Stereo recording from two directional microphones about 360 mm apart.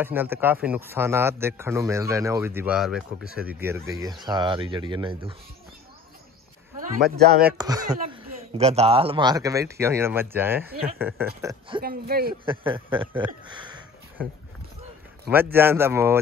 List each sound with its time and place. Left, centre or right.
0.0 s a man's voice: centre
6.8 s speech: right
7.5 s a man's voice: centre
11.8 s speech: right
12.4 s speech: centre
15.2 s a man's voice: centre